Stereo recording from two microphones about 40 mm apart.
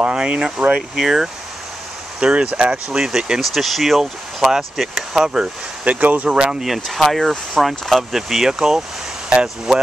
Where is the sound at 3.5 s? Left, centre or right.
Centre.